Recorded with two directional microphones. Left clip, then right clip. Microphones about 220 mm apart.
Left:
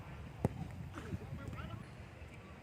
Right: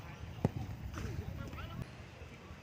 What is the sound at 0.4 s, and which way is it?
Basketball bounce, 5° left (ahead or behind).